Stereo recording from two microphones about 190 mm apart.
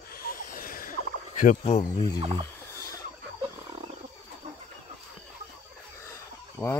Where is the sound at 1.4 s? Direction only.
40° left (ahead or behind).